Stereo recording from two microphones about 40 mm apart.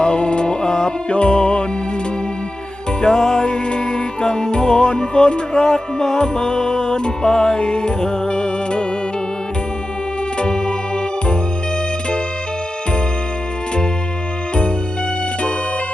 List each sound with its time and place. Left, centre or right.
0.0 s music: left
3.0 s music: centre
10.4 s organ: left